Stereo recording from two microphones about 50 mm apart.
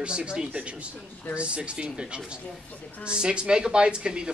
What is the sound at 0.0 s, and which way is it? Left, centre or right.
Speech, centre.